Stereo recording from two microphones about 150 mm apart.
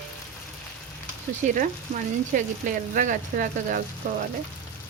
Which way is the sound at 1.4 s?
65° right (ahead or behind).